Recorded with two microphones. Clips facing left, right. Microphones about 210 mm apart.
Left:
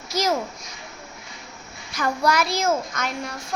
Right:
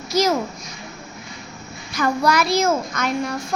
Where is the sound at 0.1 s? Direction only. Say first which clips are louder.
Right 4 dB; 85° right.